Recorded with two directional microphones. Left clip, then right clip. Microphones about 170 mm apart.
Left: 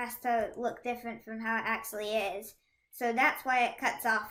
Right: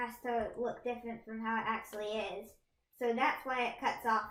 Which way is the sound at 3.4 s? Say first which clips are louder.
Left 6 dB; 25° left (ahead or behind).